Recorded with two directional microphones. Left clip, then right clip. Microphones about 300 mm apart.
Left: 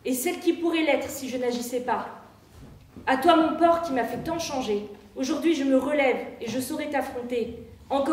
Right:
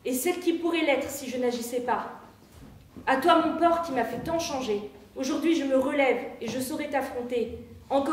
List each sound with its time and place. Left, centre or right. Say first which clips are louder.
0.0 s a woman's voice: left 1 dB; centre
3.1 s a woman's voice: left 2 dB; centre